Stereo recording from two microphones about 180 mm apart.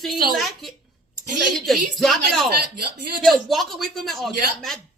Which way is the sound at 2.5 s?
60° right (ahead or behind).